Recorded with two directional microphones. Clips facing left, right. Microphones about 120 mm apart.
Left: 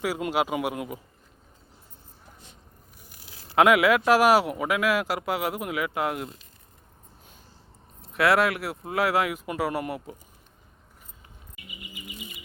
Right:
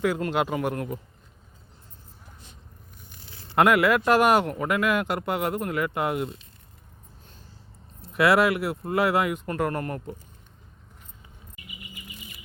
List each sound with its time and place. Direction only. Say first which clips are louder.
0.0 s a man's voice: right 2 dB; 10° left (ahead or behind)
3.2 s speech: left 1 dB; 5° left (ahead or behind)
8.0 s speech: right 2 dB; centre (ahead or behind)